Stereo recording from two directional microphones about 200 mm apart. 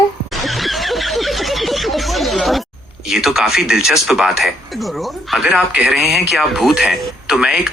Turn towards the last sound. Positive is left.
turn(degrees=-5)  # may be behind; listen again after turning